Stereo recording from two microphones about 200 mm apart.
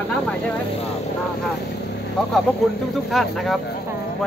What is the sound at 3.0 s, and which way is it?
Speech, centre (ahead or behind).